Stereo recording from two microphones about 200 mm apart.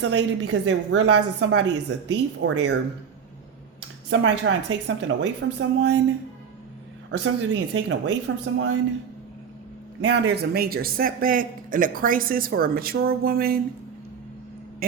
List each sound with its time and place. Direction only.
0.0 s a woman's voice: 60° right (ahead or behind)
4.1 s a woman's voice: 65° right (ahead or behind)
7.1 s a woman's voice: 65° right (ahead or behind)
10.0 s a man's voice: 55° right (ahead or behind)